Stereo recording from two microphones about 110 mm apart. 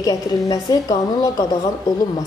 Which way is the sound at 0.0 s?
35° left (ahead or behind).